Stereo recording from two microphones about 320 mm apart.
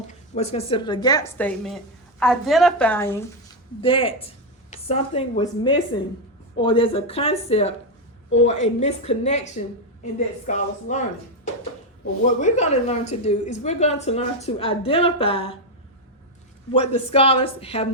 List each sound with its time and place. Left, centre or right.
0.1 s a woman's voice: centre
12.4 s a woman's voice: left
16.7 s a woman's voice: centre